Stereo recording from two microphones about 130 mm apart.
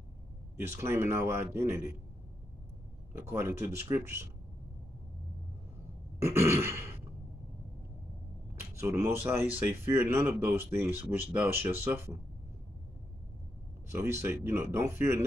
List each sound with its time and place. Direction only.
0.7 s speech: 20° right (ahead or behind)
3.1 s speech: 20° right (ahead or behind)
6.2 s throat clearing: 20° right (ahead or behind)
8.5 s speech: 20° right (ahead or behind)
13.9 s speech: 20° right (ahead or behind)